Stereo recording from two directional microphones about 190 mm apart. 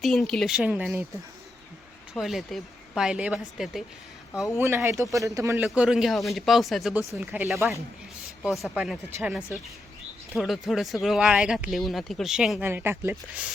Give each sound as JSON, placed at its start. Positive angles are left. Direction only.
{"t": 0.0, "sound": "speech", "side_deg": 0}
{"t": 2.1, "sound": "speech", "side_deg": 0}
{"t": 4.5, "sound": "speech", "side_deg": -15}
{"t": 5.6, "sound": "speech", "side_deg": -5}